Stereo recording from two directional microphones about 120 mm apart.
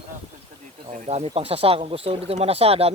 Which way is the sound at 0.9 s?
65° right (ahead or behind).